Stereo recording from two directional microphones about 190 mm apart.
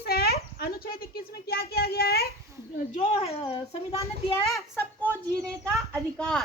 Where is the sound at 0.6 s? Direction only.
50° left (ahead or behind).